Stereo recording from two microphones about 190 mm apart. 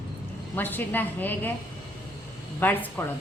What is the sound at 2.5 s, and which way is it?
Speech, 10° left (ahead or behind).